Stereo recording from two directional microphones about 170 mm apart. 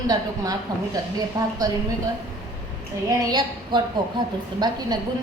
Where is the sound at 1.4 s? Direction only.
20° right (ahead or behind).